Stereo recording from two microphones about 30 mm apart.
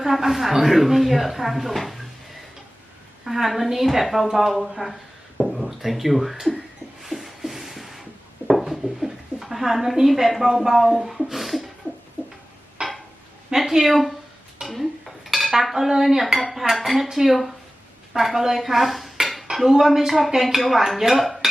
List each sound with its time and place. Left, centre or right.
0.1 s a woman's voice: centre
7.0 s rub: centre
8.6 s speech: centre
12.8 s dishes: right
13.6 s a woman's voice: centre
14.7 s dishes: centre
15.7 s a woman's voice: centre
16.2 s a woman's voice: centre
19.5 s dishes: right
19.8 s a woman's voice: centre
21.1 s dishes: centre